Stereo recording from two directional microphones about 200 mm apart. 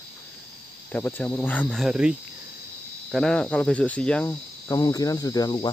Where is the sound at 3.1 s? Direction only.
Centre (ahead or behind).